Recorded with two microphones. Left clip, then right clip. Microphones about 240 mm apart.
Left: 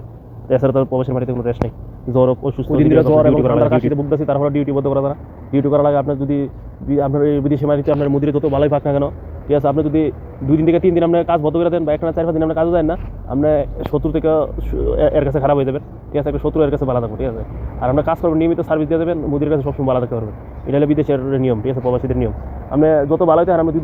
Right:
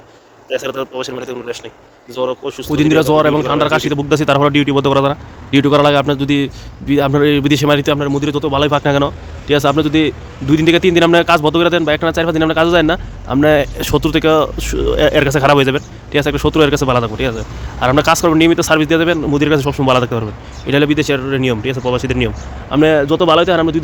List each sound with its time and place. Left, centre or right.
0.4 s speech: centre
2.2 s a man's voice: centre; by 7.9 s right
7.9 s a man's voice: right